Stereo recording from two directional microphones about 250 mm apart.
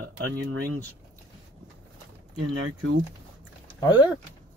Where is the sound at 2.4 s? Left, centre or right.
Right.